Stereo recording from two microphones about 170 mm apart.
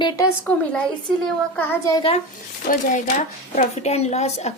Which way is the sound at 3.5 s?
40° left (ahead or behind).